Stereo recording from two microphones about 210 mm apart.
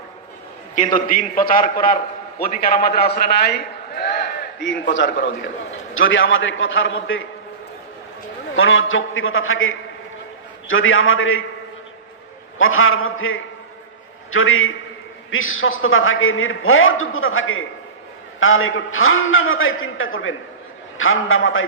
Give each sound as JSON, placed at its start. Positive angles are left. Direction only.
{"t": 0.9, "sound": "a man's voice", "side_deg": 40}
{"t": 8.5, "sound": "a man's voice", "side_deg": 70}
{"t": 12.5, "sound": "a man's voice", "side_deg": 75}